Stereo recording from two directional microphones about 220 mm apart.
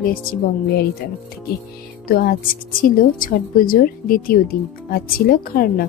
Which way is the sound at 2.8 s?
40° left (ahead or behind).